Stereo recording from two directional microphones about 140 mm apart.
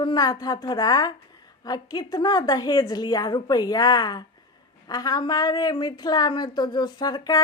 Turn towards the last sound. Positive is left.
turn(degrees=30)  # may be behind; listen again after turning